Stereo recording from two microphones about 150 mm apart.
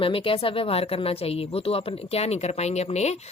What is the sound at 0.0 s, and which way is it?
Speech, 35° left (ahead or behind).